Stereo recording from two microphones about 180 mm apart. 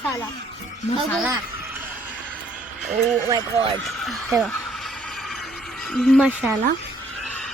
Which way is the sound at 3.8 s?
Centre (ahead or behind).